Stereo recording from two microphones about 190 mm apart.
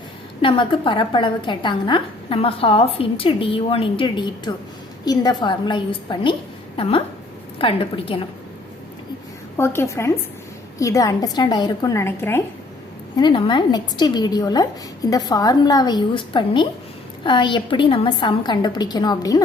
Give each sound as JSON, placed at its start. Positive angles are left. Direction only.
{"t": 0.4, "sound": "a woman's voice", "side_deg": 25}
{"t": 9.6, "sound": "a woman's voice", "side_deg": 15}
{"t": 13.1, "sound": "a woman's voice", "side_deg": 25}